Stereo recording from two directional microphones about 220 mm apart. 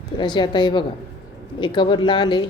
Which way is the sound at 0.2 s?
20° left (ahead or behind).